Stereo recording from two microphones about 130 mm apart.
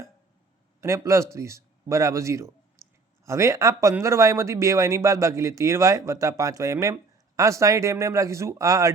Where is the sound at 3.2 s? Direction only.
25° right (ahead or behind).